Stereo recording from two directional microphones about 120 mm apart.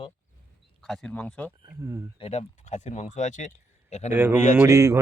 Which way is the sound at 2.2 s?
60° left (ahead or behind).